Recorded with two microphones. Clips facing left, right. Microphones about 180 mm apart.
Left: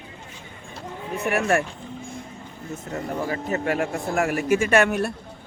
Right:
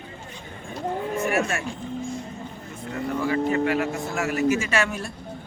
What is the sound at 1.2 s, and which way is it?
Speech, 60° left (ahead or behind).